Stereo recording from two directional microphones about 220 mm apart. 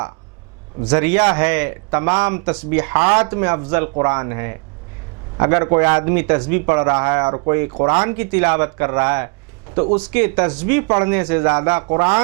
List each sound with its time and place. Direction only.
0.9 s speech: 10° right (ahead or behind)
8.0 s speech: 10° right (ahead or behind)
10.8 s speech: 20° right (ahead or behind)
11.1 s speech: 10° right (ahead or behind)